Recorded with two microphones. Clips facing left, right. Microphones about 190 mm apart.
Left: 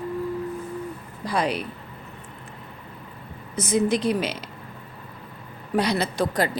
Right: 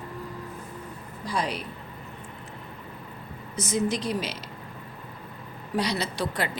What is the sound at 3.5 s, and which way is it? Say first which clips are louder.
Speech: left 5 dB; 60° left (ahead or behind).